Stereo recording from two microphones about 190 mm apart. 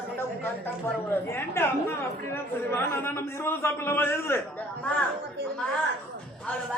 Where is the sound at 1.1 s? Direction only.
10° left (ahead or behind).